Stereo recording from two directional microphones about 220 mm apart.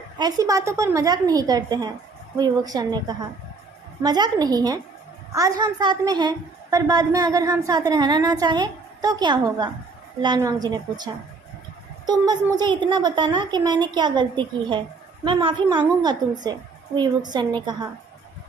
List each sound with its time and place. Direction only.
0.2 s a woman's voice: 15° right (ahead or behind)